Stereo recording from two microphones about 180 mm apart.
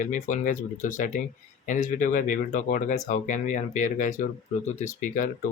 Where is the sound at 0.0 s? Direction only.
45° left (ahead or behind).